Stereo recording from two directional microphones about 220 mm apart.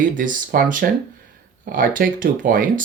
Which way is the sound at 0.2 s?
40° right (ahead or behind).